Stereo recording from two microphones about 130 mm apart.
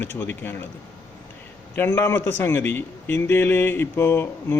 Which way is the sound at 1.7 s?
15° left (ahead or behind).